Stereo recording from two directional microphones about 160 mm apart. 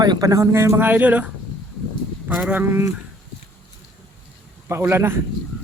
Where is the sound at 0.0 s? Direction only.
25° right (ahead or behind).